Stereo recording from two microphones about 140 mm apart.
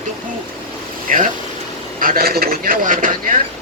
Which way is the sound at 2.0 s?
90° right.